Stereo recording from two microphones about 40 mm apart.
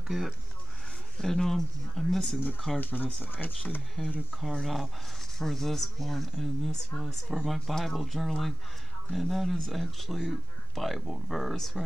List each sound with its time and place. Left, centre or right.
1.1 s speech: centre
2.8 s speech: left
4.0 s speech: left
4.4 s speech: centre